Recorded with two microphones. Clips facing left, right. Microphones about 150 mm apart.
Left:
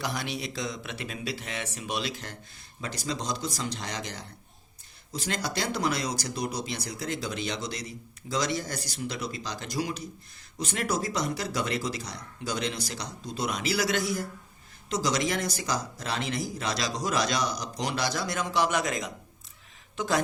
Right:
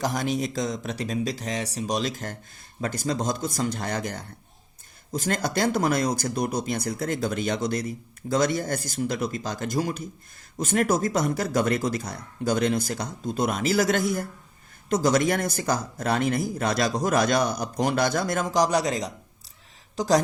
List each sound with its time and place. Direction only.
0.0 s speech: 45° right (ahead or behind)